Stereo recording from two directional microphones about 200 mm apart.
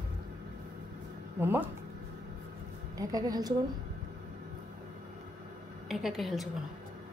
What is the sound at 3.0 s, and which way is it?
Speech, 20° right (ahead or behind).